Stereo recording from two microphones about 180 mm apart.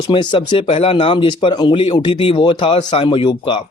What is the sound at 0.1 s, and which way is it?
Speech, 30° left (ahead or behind).